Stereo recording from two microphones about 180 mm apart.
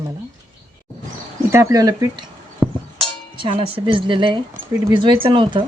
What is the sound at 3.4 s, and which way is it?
Speech, 30° right (ahead or behind).